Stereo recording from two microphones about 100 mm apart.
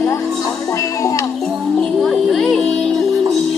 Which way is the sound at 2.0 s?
Centre (ahead or behind).